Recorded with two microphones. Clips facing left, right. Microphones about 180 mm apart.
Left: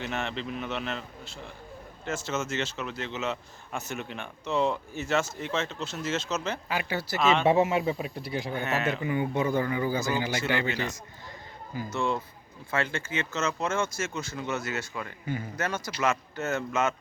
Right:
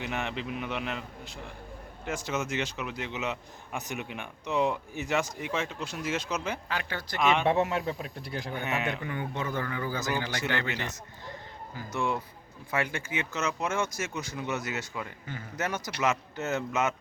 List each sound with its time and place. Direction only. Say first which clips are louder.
0.0 s a man's voice: left 1 dB; 15° right (ahead or behind)
6.7 s a man's voice: left 4 dB; 10° left (ahead or behind)
8.6 s a man's voice: left 1 dB; 15° right (ahead or behind)
8.9 s a man's voice: left 6 dB; 10° left (ahead or behind)
11.9 s a man's voice: left 1 dB; 10° right (ahead or behind)